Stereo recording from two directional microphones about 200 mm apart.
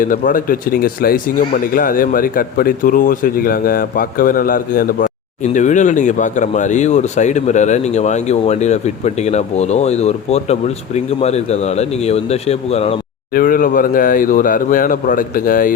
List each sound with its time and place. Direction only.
0.0 s speech: 45° left (ahead or behind)
13.3 s speech: 45° left (ahead or behind)